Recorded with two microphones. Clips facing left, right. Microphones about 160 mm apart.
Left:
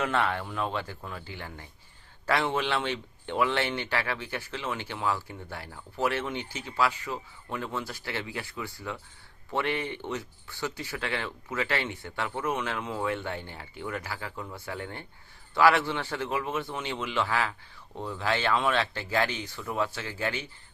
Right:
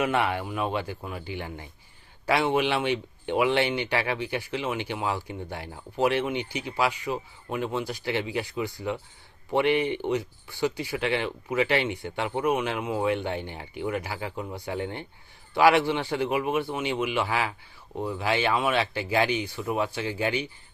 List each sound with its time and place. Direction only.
0.0 s speech: 15° right (ahead or behind)